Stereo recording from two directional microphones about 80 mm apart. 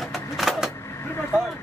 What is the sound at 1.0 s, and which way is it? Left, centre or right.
Speech, left.